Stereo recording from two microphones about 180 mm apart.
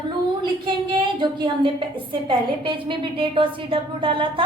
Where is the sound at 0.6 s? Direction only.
25° right (ahead or behind).